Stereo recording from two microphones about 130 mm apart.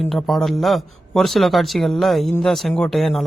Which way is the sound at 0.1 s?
Centre (ahead or behind).